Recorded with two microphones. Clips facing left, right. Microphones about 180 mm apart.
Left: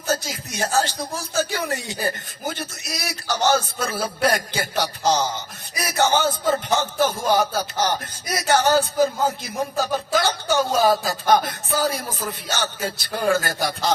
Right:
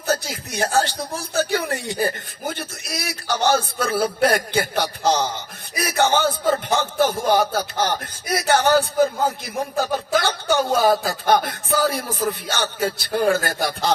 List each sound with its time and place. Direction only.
0.1 s speech: 55° right (ahead or behind)